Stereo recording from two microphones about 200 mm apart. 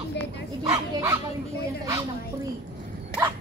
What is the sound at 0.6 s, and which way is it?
Speech, 15° right (ahead or behind).